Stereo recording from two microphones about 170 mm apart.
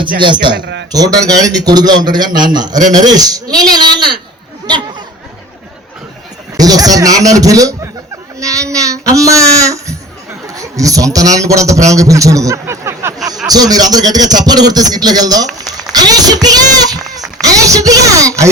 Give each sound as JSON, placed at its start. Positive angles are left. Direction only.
{"t": 0.2, "sound": "a man's voice", "side_deg": -25}
{"t": 4.6, "sound": "a sound", "side_deg": -25}
{"t": 6.6, "sound": "a man's voice", "side_deg": -20}